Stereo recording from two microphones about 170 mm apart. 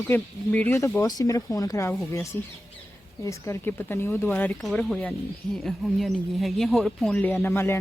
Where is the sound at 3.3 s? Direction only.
15° left (ahead or behind).